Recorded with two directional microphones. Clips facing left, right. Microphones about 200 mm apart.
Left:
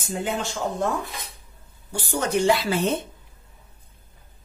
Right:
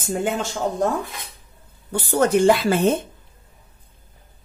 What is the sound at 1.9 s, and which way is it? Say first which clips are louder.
Speech: right 7 dB; 55° right (ahead or behind).